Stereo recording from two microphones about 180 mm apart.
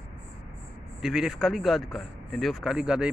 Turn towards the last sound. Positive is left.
turn(degrees=-5)  # may be behind; listen again after turning